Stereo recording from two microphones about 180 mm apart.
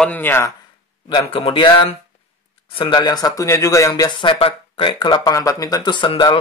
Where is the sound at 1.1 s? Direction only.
30° left (ahead or behind).